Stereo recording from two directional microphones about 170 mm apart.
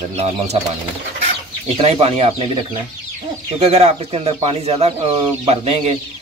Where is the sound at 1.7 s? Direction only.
35° right (ahead or behind).